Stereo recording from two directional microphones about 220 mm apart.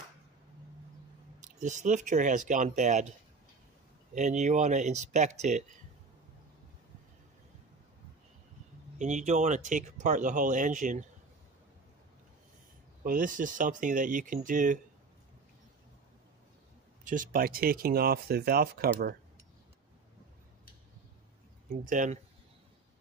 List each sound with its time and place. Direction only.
1.4 s speech: 35° right (ahead or behind)
4.1 s speech: 35° right (ahead or behind)
8.9 s speech: 35° right (ahead or behind)
13.0 s speech: 40° right (ahead or behind)
17.0 s speech: 35° right (ahead or behind)
21.8 s speech: 35° right (ahead or behind)